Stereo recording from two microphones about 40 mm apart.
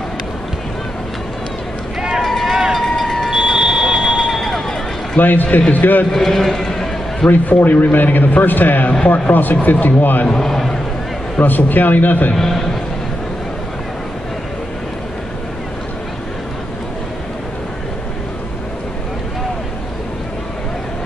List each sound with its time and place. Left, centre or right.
2.0 s run: centre
2.2 s run: centre
2.5 s run: centre
2.8 s a sound: centre
3.3 s fire alarm: centre
4.3 s a sound: centre
5.2 s a man's voice: left
6.1 s a man's voice: centre
7.2 s a man's voice: left
10.2 s a man's voice: centre
11.4 s a man's voice: left
12.4 s a man's voice: centre